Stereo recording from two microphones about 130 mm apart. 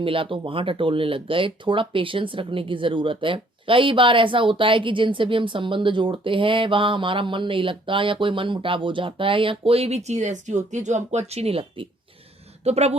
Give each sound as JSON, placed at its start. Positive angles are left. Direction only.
{"t": 0.0, "sound": "speech", "side_deg": -45}